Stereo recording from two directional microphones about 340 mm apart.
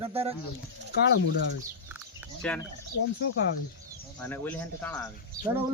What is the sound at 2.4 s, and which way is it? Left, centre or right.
Speech, centre.